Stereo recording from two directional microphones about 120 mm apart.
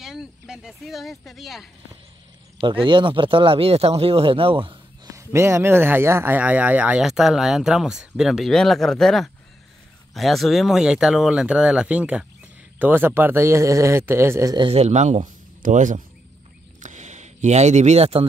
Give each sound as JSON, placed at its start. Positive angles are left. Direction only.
{"t": 0.0, "sound": "speech", "side_deg": -5}
{"t": 2.6, "sound": "speech", "side_deg": -45}
{"t": 5.1, "sound": "a man's voice", "side_deg": -25}
{"t": 14.7, "sound": "speech", "side_deg": -70}
{"t": 15.7, "sound": "speech", "side_deg": -90}
{"t": 16.8, "sound": "a sound", "side_deg": -80}